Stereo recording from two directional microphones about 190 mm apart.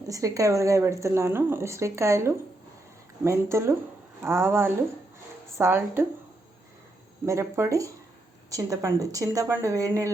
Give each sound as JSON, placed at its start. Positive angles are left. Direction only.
{"t": 0.1, "sound": "speech", "side_deg": -15}
{"t": 7.3, "sound": "speech", "side_deg": -15}